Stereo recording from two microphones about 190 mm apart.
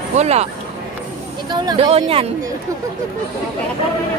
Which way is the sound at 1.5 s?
25° right (ahead or behind).